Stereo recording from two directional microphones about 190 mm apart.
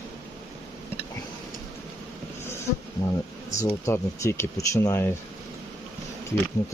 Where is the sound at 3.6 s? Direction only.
15° left (ahead or behind).